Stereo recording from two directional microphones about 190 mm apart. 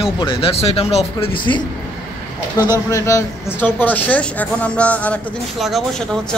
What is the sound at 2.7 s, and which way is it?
A woman's voice, 15° left (ahead or behind).